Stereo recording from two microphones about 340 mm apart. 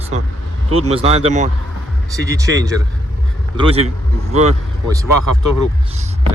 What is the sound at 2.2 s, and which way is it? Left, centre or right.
Speech, centre.